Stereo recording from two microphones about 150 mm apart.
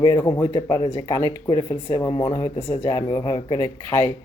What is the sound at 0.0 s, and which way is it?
Speech, 25° left (ahead or behind).